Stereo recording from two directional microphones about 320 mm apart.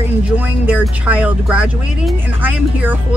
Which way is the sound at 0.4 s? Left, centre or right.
Centre.